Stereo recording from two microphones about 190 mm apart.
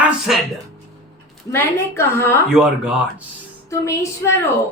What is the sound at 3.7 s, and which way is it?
Speech, 15° left (ahead or behind).